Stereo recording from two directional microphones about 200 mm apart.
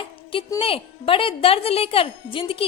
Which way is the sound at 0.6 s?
25° left (ahead or behind).